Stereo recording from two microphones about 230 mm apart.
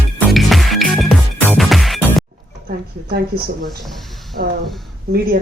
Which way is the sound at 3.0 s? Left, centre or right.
Right.